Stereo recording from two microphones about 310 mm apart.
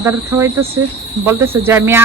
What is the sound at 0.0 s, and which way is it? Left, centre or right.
Speech, centre.